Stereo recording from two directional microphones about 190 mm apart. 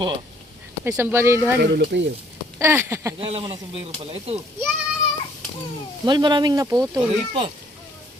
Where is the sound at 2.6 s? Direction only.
15° right (ahead or behind).